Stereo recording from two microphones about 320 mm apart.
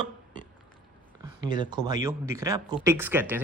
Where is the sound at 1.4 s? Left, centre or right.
Centre.